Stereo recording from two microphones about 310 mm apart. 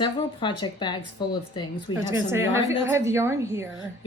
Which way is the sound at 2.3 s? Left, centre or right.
Centre.